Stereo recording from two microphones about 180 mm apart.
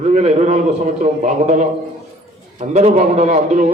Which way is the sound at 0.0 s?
40° right (ahead or behind).